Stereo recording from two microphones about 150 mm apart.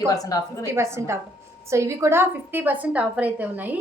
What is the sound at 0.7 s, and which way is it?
A woman's voice, 20° right (ahead or behind).